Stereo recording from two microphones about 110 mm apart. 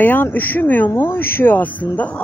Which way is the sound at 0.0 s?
15° left (ahead or behind).